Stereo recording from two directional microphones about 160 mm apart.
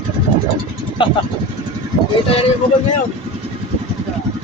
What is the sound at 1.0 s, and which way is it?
Vehicle, 30° left (ahead or behind).